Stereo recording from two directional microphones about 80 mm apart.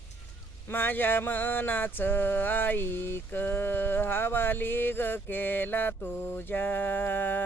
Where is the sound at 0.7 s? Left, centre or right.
Left.